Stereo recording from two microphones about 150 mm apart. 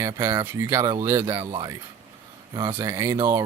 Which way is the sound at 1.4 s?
30° right (ahead or behind).